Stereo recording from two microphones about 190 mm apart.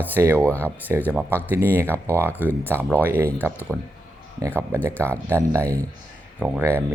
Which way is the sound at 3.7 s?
5° left (ahead or behind).